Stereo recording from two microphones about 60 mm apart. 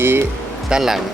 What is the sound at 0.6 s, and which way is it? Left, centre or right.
Speech, centre.